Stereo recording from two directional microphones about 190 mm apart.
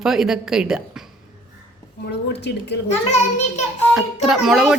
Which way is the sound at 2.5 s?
60° left (ahead or behind).